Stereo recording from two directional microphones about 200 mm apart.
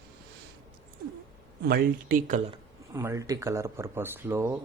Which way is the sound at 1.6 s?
50° right (ahead or behind).